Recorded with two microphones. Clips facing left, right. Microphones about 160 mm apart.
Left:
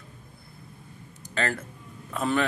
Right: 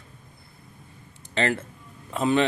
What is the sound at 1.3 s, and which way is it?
Speech, 25° right (ahead or behind).